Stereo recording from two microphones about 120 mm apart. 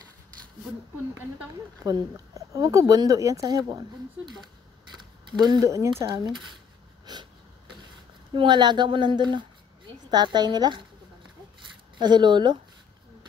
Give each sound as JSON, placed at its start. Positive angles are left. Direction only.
{"t": 1.9, "sound": "speech", "side_deg": -30}
{"t": 5.4, "sound": "speech", "side_deg": -30}
{"t": 6.0, "sound": "speech", "side_deg": -40}
{"t": 7.1, "sound": "wheeze", "side_deg": -40}
{"t": 8.4, "sound": "speech", "side_deg": -40}
{"t": 12.0, "sound": "speech", "side_deg": -40}